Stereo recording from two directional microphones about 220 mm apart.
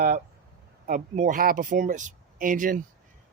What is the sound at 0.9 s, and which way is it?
Speech, 35° right (ahead or behind).